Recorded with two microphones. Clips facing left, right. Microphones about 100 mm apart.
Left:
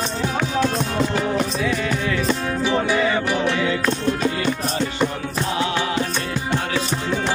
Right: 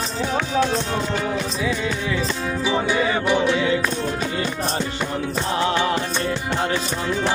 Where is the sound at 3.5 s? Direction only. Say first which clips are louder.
Right 1 dB; 15° right (ahead or behind).